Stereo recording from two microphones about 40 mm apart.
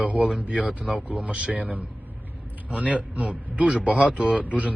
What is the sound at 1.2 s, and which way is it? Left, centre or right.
Speech, right.